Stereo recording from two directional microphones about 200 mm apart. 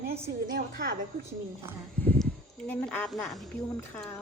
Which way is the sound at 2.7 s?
10° left (ahead or behind).